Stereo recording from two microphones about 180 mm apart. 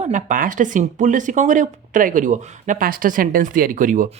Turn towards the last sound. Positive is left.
turn(degrees=-45)  # may be behind; listen again after turning